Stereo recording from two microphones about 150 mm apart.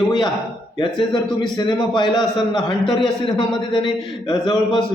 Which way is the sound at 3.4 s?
30° left (ahead or behind).